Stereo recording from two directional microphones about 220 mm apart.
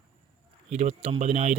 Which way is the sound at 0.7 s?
30° right (ahead or behind).